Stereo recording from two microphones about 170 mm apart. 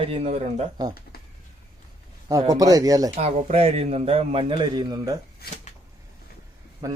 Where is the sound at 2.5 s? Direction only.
20° right (ahead or behind).